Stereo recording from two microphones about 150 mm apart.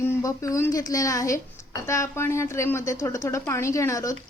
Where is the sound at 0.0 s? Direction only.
20° left (ahead or behind).